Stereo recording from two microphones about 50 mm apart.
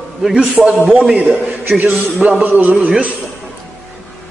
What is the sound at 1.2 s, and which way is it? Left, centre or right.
Speech, right.